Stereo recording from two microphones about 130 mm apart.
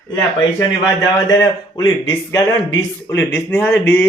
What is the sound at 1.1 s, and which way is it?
Speech, 25° left (ahead or behind).